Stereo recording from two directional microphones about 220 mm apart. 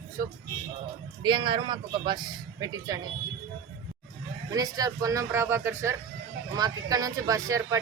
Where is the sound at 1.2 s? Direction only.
20° right (ahead or behind).